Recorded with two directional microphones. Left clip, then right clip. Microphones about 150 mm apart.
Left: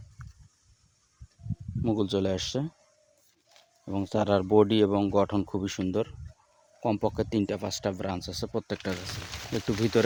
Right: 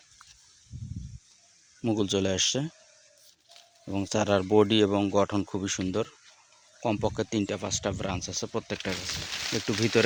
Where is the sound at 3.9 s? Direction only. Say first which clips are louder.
Even; 15° left (ahead or behind).